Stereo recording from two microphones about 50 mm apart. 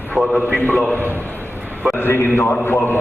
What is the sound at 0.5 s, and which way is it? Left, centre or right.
Speech, left.